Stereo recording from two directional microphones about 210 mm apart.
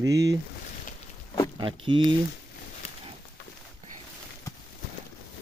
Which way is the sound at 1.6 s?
25° right (ahead or behind).